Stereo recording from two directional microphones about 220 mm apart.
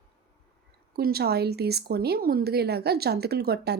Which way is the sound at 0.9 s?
45° right (ahead or behind).